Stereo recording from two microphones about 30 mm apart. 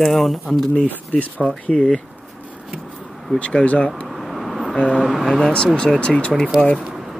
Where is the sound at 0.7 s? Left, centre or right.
Left.